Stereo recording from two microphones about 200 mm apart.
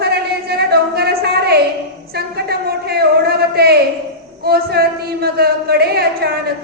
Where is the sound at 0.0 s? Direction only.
55° right (ahead or behind).